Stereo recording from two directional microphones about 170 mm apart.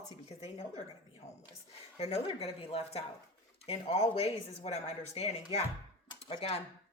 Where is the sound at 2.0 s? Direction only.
35° left (ahead or behind).